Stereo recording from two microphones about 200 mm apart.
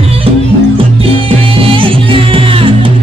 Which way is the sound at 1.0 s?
30° right (ahead or behind).